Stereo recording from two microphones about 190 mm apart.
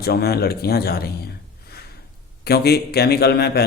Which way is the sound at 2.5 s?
55° left (ahead or behind).